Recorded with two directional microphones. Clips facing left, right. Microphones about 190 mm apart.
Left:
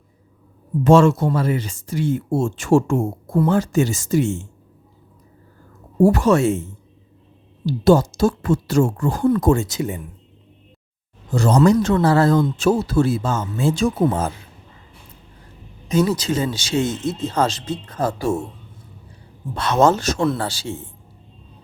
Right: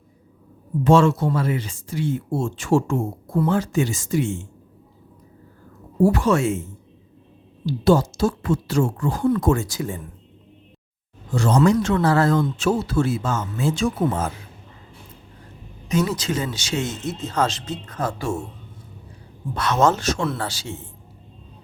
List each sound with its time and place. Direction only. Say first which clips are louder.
0.9 s speech: left 3 dB; 45° left (ahead or behind)
6.0 s speech: left 3 dB; 45° left (ahead or behind)
7.6 s speech: left 3 dB; 45° left (ahead or behind)
9.5 s speech: left 3 dB; 25° left (ahead or behind)
11.3 s speech: left 3 dB; 40° left (ahead or behind)
15.9 s speech: left 4 dB; 35° left (ahead or behind)
19.5 s speech: left 3 dB; 30° left (ahead or behind)